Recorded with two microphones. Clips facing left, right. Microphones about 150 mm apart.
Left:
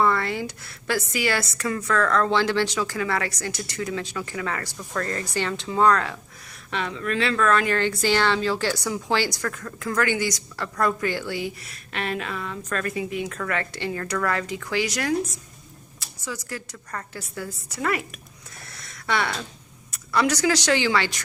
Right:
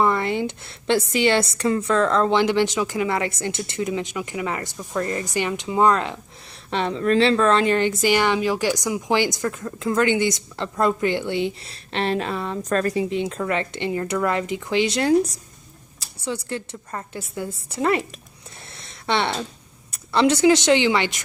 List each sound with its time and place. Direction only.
0.0 s a woman's voice: 20° right (ahead or behind)
6.7 s a woman's voice: 30° right (ahead or behind)
18.8 s a sound: 25° right (ahead or behind)
19.9 s a woman's voice: 25° right (ahead or behind)